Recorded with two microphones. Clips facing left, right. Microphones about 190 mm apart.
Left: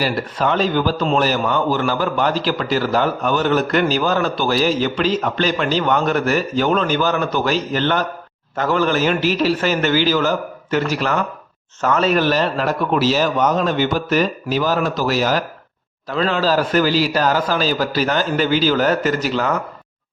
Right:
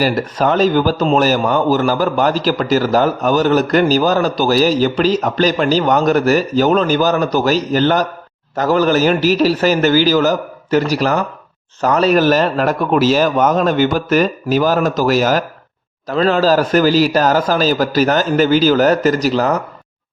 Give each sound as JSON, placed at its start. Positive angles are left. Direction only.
{"t": 0.0, "sound": "a man's voice", "side_deg": -45}